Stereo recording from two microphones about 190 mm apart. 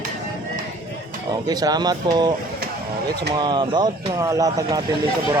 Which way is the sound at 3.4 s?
25° right (ahead or behind).